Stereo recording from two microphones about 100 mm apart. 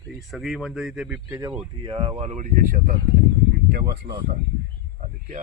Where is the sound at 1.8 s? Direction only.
60° right (ahead or behind); by 2.3 s 80° right.